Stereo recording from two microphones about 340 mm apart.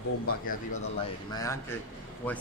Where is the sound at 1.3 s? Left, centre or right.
Centre.